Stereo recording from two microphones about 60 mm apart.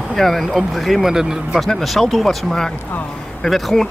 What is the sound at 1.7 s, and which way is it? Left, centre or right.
Speech, centre.